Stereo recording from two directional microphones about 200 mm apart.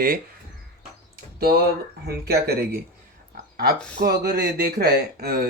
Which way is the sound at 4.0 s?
55° right (ahead or behind).